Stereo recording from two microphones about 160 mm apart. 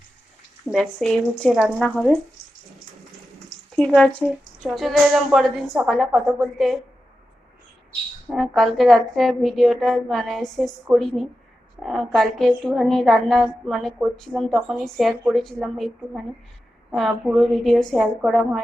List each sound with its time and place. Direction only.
0.6 s a woman's voice: centre (ahead or behind)
3.8 s a woman's voice: 5° left (ahead or behind)
8.3 s a woman's voice: centre (ahead or behind)